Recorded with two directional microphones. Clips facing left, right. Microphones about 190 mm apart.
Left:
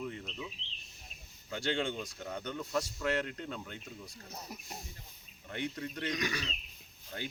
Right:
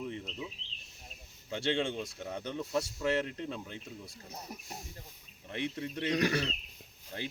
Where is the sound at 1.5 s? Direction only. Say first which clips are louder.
Right 2 dB; 25° right (ahead or behind).